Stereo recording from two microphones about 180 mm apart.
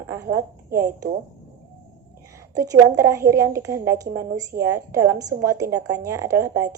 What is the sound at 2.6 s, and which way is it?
A woman's voice, 15° right (ahead or behind).